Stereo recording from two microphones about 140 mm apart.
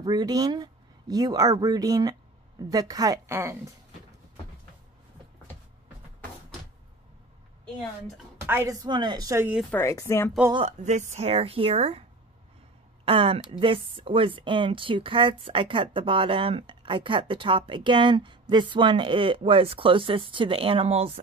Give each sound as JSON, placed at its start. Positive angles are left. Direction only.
{"t": 0.0, "sound": "speech", "side_deg": -30}
{"t": 8.4, "sound": "speech", "side_deg": -20}
{"t": 9.7, "sound": "speech", "side_deg": 20}
{"t": 10.8, "sound": "speech", "side_deg": -55}
{"t": 13.0, "sound": "a woman's voice", "side_deg": -45}